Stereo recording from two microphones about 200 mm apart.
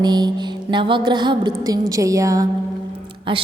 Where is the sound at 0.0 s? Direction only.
20° right (ahead or behind).